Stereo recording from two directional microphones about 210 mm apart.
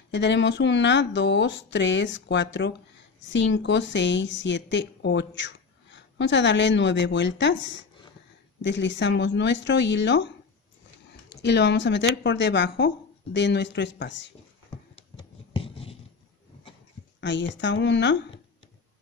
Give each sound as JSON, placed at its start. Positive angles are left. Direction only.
{"t": 0.1, "sound": "a woman's voice", "side_deg": 55}
{"t": 11.4, "sound": "a woman's voice", "side_deg": 55}
{"t": 15.0, "sound": "a sound", "side_deg": 25}
{"t": 17.2, "sound": "a woman's voice", "side_deg": 55}